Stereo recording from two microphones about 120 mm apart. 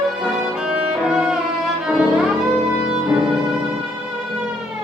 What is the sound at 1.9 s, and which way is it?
Violin, 5° right (ahead or behind).